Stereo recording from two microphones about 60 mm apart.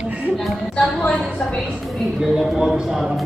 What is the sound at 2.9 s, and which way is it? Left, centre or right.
Speech, centre.